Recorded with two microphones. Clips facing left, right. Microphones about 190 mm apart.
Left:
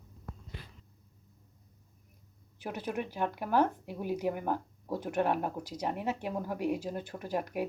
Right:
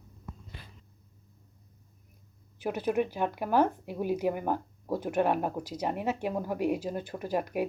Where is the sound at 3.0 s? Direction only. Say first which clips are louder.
Right 5 dB; 10° right (ahead or behind).